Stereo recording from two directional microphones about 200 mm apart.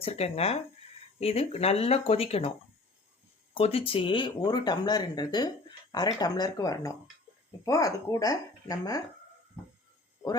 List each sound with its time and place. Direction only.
0.0 s speech: 30° left (ahead or behind)
3.5 s speech: 30° left (ahead or behind)
9.6 s a sound: 5° right (ahead or behind)